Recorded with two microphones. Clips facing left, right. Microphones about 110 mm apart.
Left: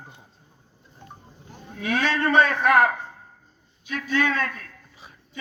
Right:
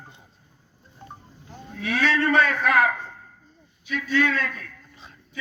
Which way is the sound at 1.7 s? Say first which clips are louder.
Right 1 dB; 50° left (ahead or behind).